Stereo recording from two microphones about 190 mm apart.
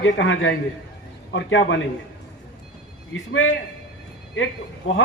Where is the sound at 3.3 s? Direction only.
90° left.